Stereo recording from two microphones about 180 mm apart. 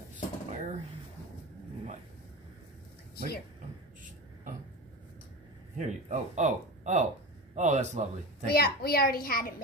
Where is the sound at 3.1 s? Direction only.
60° left (ahead or behind).